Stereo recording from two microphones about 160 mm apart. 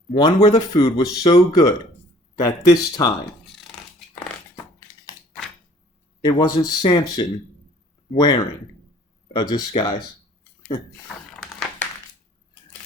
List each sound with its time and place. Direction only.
0.1 s speech: 30° left (ahead or behind)
6.2 s speech: 25° left (ahead or behind)